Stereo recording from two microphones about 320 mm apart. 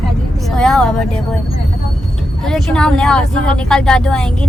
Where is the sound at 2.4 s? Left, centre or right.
Centre.